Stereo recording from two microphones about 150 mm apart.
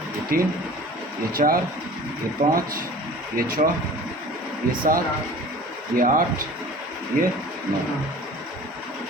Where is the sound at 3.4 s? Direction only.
70° right (ahead or behind).